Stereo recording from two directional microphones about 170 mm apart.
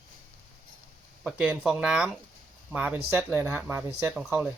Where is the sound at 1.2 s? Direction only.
5° right (ahead or behind).